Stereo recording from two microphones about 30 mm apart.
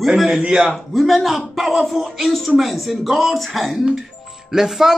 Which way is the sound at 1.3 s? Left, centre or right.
Centre.